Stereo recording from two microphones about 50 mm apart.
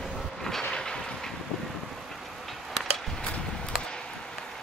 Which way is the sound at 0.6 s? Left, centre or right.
Centre.